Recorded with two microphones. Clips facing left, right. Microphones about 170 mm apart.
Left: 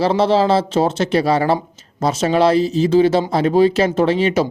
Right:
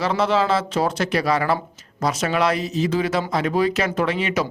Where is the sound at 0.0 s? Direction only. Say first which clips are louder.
Left 5 dB; 30° left (ahead or behind).